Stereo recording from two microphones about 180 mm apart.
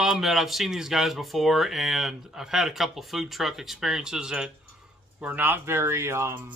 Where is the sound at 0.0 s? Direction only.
Centre (ahead or behind).